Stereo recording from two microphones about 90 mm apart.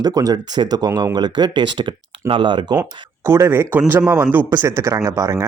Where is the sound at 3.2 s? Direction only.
30° right (ahead or behind).